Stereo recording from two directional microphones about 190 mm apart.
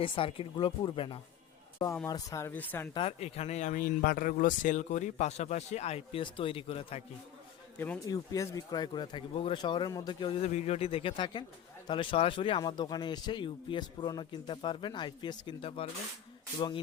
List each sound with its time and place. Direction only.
0.0 s speech: 25° left (ahead or behind); by 2.9 s 10° left (ahead or behind)
2.9 s speech: 30° left (ahead or behind)
7.8 s speech: 15° left (ahead or behind)